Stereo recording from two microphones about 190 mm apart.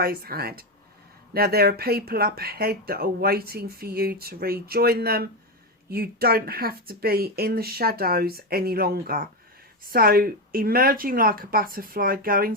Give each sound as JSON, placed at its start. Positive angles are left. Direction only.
{"t": 0.0, "sound": "speech", "side_deg": -50}